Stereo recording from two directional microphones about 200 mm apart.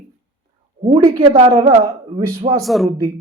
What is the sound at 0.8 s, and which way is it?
Speech, 25° right (ahead or behind).